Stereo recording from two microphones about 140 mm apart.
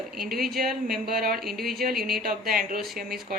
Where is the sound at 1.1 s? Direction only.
90° right.